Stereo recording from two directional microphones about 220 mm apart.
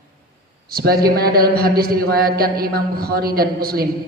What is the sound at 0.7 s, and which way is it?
A man's voice, 45° right (ahead or behind).